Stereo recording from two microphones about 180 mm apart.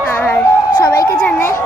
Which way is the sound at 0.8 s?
20° left (ahead or behind).